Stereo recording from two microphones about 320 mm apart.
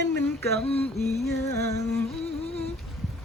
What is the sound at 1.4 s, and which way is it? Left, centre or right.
Music, centre.